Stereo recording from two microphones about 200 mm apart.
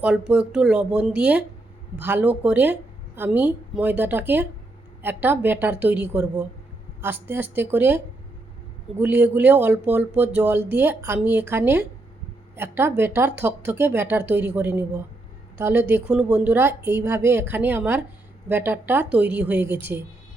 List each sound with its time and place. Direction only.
0.0 s speech: 5° right (ahead or behind)